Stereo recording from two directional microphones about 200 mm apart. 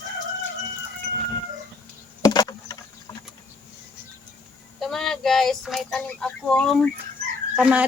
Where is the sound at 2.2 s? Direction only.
20° left (ahead or behind).